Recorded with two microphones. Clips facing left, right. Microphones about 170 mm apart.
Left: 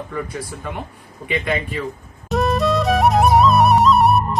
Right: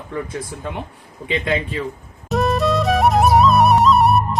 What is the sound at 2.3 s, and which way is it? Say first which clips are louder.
Music: even; centre (ahead or behind).